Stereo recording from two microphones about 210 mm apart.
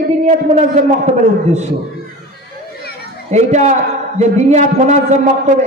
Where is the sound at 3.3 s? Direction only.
35° right (ahead or behind).